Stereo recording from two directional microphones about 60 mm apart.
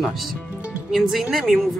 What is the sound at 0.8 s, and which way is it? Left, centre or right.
Speech, centre.